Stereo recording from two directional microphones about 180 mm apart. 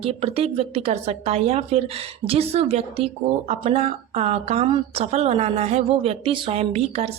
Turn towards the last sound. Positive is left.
turn(degrees=-35)  # may be behind; listen again after turning